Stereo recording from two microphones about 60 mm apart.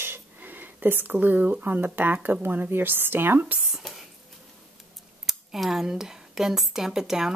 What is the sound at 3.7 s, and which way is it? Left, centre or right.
Dishes, centre.